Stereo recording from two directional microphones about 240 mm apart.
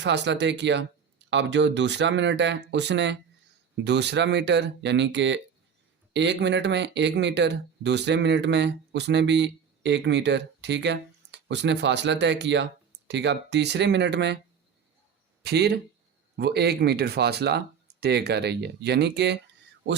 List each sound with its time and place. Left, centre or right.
0.0 s speech: right
15.4 s speech: right